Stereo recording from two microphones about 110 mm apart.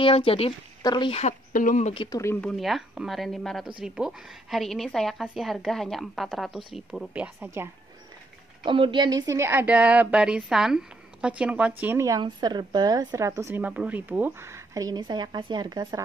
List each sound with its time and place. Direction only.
0.0 s speech: 55° left (ahead or behind)
0.8 s speech: 45° left (ahead or behind)
2.0 s speech: 30° left (ahead or behind)
2.4 s a woman's voice: centre (ahead or behind)
8.6 s a woman's voice: 50° right (ahead or behind); by 12.0 s 15° right (ahead or behind)
12.2 s speech: 40° right (ahead or behind)
13.6 s speech: 15° right (ahead or behind); by 16.0 s 40° right (ahead or behind)